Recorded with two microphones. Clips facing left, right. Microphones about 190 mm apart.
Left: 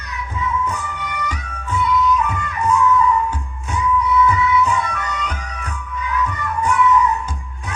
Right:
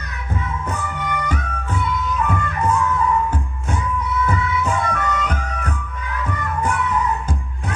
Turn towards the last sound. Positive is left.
turn(degrees=-50)  # may be behind; listen again after turning